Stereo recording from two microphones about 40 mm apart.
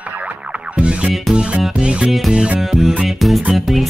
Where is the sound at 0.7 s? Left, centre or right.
Right.